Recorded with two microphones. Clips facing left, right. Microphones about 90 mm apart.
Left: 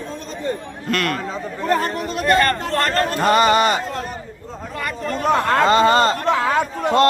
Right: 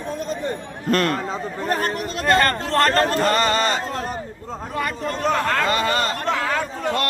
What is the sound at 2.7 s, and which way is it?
Speech, 30° right (ahead or behind).